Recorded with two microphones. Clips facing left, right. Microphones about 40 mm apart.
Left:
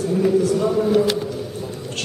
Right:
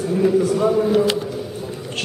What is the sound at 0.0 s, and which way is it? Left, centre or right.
Speech, centre.